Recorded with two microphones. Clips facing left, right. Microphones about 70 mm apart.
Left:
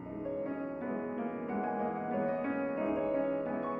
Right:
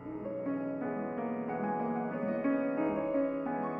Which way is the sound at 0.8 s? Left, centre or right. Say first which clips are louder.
Right 1 dB; centre.